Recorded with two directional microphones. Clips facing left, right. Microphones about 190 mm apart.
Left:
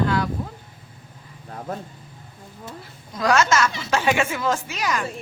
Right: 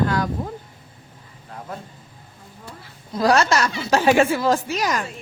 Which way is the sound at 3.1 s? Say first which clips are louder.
Right 2 dB; 35° right (ahead or behind).